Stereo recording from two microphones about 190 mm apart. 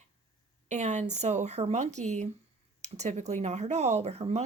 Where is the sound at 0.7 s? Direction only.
40° right (ahead or behind).